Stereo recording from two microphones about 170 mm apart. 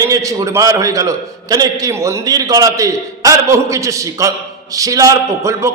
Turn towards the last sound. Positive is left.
turn(degrees=-15)  # may be behind; listen again after turning